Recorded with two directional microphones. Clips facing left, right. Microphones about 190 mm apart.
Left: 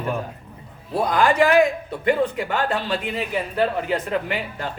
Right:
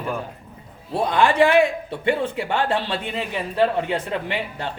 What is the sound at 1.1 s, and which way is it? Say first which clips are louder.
A man's voice: right 1 dB; 25° right (ahead or behind).